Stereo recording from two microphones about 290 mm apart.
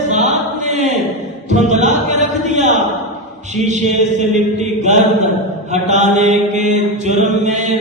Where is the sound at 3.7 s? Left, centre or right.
Right.